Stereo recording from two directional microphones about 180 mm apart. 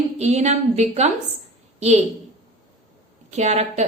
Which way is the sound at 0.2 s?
40° right (ahead or behind).